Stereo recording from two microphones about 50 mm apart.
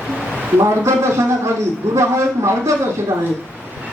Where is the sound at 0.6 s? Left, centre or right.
Right.